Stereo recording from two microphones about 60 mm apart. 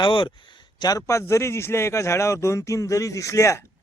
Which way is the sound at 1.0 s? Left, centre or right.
Left.